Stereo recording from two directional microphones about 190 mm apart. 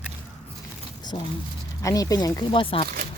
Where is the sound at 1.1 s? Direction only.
25° left (ahead or behind).